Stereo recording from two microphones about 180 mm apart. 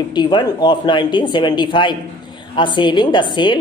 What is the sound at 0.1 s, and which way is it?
A woman's voice, 25° left (ahead or behind).